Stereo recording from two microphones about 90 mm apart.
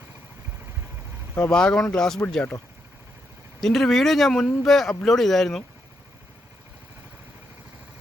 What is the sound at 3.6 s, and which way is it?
Speech, 5° left (ahead or behind).